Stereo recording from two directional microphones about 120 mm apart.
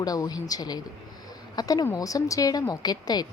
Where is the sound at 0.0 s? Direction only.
30° left (ahead or behind).